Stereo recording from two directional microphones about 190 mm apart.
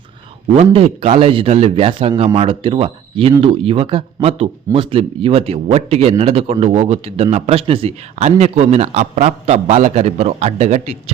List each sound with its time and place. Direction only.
0.5 s a man's voice: 30° right (ahead or behind)